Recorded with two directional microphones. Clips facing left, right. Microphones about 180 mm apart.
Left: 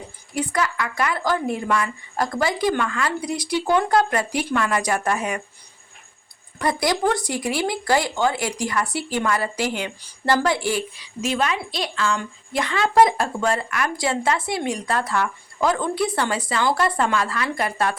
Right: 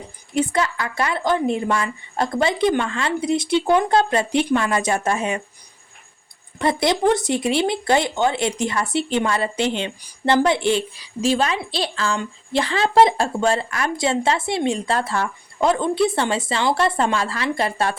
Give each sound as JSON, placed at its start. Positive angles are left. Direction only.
{"t": 0.3, "sound": "a woman's voice", "side_deg": -25}
{"t": 6.6, "sound": "a woman's voice", "side_deg": -25}